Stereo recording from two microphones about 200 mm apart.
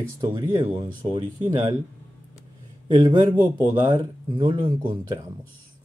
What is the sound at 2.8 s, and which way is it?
Speech, 20° right (ahead or behind).